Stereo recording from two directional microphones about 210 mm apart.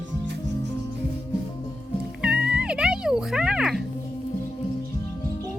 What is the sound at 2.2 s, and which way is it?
Music, 5° right (ahead or behind).